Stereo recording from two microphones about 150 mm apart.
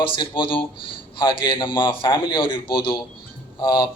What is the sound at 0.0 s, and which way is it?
A man's voice, 35° left (ahead or behind).